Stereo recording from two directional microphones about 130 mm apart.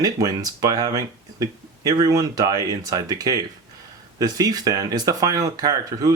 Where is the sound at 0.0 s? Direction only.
30° right (ahead or behind).